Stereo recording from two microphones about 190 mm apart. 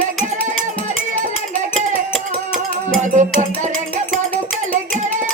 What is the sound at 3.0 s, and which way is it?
Music, 40° right (ahead or behind).